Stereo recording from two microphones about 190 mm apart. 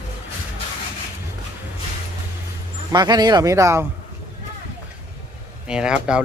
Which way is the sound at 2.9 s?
20° right (ahead or behind).